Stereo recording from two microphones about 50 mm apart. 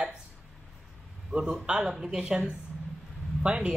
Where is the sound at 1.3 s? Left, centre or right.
Centre.